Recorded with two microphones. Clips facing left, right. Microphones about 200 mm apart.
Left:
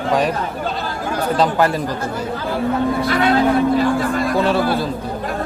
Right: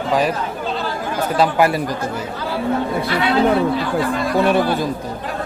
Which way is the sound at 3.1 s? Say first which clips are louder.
Left 3 dB; 45° left (ahead or behind).